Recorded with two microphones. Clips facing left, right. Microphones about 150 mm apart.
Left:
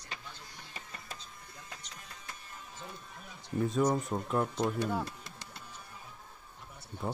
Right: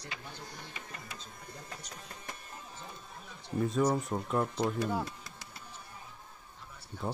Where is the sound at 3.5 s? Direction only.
Centre (ahead or behind).